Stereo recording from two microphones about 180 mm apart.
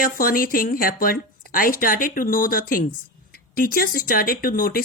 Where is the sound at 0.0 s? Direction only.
50° left (ahead or behind).